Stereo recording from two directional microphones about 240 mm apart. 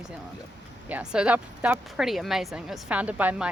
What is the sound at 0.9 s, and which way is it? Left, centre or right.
Speech, centre.